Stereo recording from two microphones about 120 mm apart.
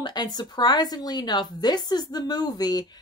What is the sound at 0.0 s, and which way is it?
Speech, 35° left (ahead or behind).